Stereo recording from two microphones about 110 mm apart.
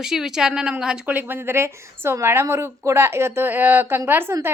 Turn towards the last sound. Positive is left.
turn(degrees=-20)  # may be behind; listen again after turning